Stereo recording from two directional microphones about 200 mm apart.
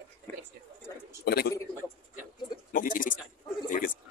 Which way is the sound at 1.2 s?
50° left (ahead or behind).